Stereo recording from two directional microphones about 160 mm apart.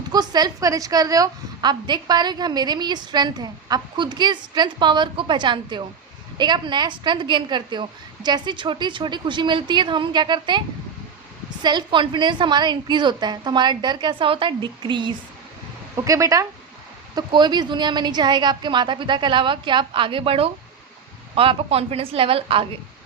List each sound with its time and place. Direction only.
0.1 s a woman's voice: 25° right (ahead or behind)
11.6 s a woman's voice: 30° right (ahead or behind)
16.0 s a woman's voice: 20° right (ahead or behind); by 22.6 s 35° right (ahead or behind)